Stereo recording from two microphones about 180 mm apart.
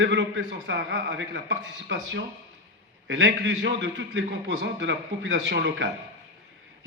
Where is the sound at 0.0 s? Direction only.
85° right.